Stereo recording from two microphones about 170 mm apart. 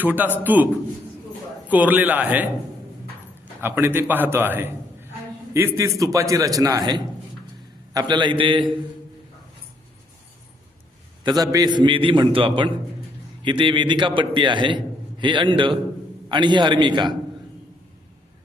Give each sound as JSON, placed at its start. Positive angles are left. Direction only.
{"t": 0.0, "sound": "a man's voice", "side_deg": -10}
{"t": 11.2, "sound": "a man's voice", "side_deg": -25}